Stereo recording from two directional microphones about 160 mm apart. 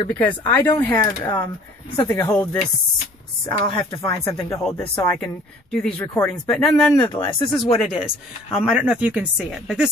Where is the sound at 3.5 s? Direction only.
30° left (ahead or behind).